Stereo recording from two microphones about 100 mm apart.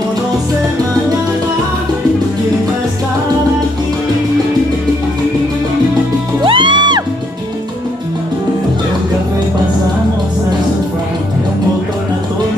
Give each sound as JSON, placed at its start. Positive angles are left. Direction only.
{"t": 6.4, "sound": "music", "side_deg": -55}